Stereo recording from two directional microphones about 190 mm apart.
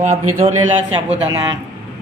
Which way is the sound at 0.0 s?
40° right (ahead or behind).